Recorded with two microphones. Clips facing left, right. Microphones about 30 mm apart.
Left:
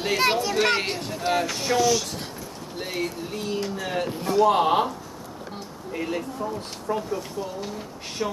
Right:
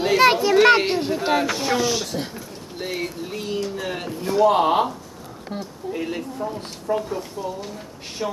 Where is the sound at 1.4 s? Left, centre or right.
Centre.